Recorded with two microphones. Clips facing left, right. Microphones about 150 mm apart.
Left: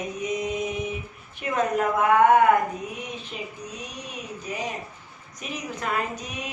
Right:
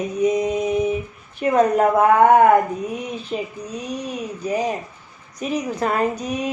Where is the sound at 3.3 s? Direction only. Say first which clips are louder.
Right 9 dB; 40° right (ahead or behind).